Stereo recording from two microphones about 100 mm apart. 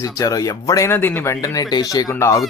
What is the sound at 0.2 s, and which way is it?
Speech, 35° left (ahead or behind).